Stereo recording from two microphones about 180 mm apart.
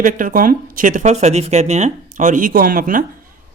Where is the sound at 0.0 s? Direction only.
45° right (ahead or behind).